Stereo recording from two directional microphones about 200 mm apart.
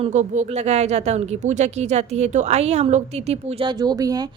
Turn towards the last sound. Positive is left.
turn(degrees=-20)  # may be behind; listen again after turning